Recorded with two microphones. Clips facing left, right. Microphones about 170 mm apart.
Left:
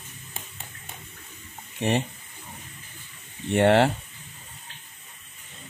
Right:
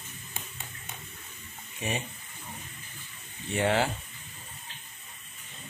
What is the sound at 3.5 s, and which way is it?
Speech, 65° left (ahead or behind).